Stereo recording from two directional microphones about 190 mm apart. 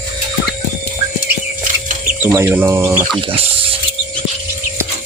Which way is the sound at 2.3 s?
10° right (ahead or behind).